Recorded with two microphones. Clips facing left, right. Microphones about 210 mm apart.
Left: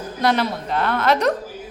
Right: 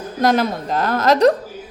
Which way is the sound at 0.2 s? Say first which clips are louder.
Right 3 dB; 45° right (ahead or behind).